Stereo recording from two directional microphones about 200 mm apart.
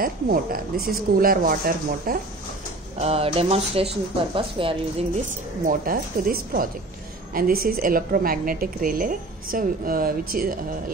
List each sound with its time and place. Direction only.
0.0 s a woman's voice: 45° right (ahead or behind)
3.0 s speech: 30° right (ahead or behind)
5.7 s a woman's voice: 45° right (ahead or behind)